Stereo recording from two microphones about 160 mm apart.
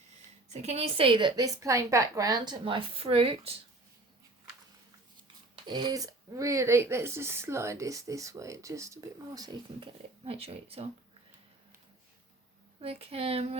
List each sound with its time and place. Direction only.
0.4 s a woman's voice: 45° right (ahead or behind)
5.6 s speech: 25° right (ahead or behind)
12.8 s a woman's voice: 35° right (ahead or behind)